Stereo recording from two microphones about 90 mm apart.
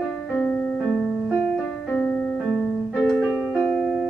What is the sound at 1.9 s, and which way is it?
Music, 20° left (ahead or behind).